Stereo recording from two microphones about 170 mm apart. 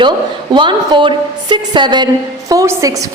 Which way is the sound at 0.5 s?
25° right (ahead or behind).